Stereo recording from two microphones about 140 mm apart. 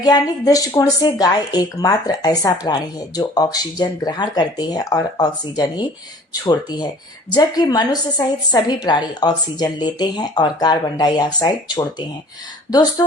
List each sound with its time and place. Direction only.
0.0 s speech: 25° left (ahead or behind)